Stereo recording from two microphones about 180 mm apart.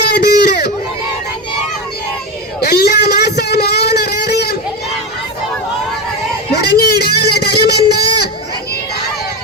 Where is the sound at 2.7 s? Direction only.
60° left (ahead or behind).